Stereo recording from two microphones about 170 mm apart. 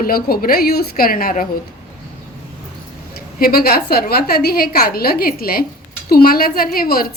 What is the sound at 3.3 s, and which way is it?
A woman's voice, 60° left (ahead or behind).